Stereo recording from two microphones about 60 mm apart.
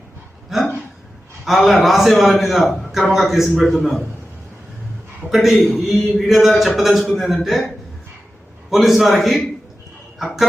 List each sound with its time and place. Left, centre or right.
1.5 s a man's voice: centre
5.3 s a man's voice: centre
8.7 s a man's voice: centre